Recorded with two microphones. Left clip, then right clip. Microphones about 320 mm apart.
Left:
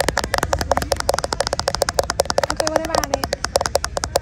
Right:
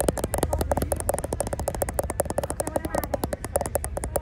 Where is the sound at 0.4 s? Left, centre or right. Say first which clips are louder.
Left 7 dB; right.